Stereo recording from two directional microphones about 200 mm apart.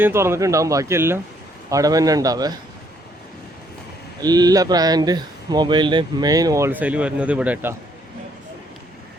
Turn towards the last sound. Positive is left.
turn(degrees=-10)  # may be behind; listen again after turning